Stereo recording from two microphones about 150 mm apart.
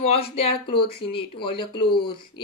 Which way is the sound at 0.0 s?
45° left (ahead or behind).